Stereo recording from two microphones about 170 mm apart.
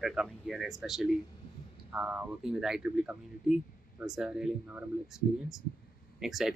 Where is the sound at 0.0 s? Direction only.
5° right (ahead or behind).